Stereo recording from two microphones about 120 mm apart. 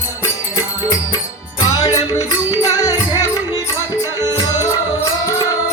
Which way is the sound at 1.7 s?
30° left (ahead or behind).